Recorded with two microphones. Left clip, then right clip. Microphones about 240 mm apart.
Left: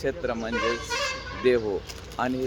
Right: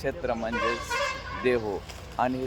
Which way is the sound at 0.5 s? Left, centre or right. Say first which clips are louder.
Left 1 dB; left.